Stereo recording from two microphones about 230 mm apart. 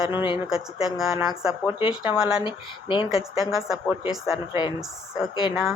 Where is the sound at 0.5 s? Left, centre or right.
Centre.